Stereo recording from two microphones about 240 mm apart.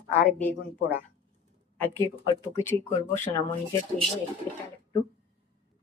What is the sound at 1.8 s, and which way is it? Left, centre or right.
Speech, centre.